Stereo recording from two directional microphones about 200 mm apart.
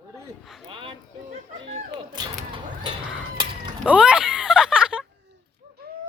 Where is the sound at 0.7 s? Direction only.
25° right (ahead or behind).